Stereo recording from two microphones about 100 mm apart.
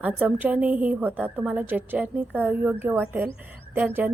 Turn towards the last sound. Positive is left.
turn(degrees=-20)  # may be behind; listen again after turning